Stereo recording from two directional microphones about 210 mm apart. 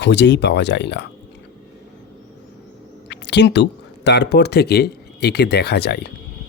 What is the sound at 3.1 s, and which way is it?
Speech, 55° left (ahead or behind).